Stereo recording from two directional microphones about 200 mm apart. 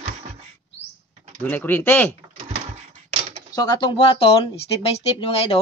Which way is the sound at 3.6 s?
20° left (ahead or behind).